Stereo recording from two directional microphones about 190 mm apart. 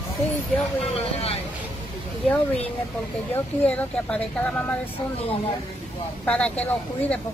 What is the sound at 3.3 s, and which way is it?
Speech, 5° left (ahead or behind).